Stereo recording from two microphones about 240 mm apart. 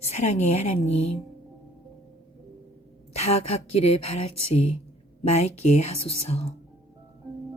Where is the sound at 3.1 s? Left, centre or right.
Left.